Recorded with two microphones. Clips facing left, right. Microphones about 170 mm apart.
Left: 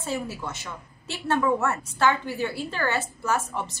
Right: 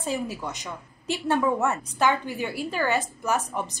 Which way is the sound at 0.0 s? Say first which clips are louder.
Right 1 dB; 15° right (ahead or behind).